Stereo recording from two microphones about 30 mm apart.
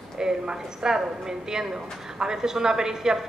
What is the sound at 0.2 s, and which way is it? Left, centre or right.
A woman's voice, right.